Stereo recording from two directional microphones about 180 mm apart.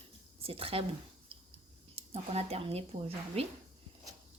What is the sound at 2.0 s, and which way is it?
A woman's voice, 35° right (ahead or behind).